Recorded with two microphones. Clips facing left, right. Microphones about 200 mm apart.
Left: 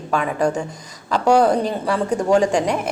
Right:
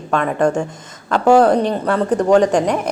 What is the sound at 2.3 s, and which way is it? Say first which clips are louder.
Speech: right 3 dB; 40° right (ahead or behind).